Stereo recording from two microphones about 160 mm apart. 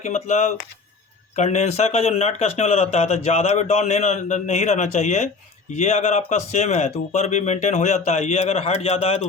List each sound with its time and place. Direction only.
0.0 s speech: 45° left (ahead or behind)